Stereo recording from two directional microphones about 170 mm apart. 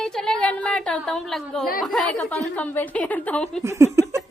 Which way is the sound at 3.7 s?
15° right (ahead or behind).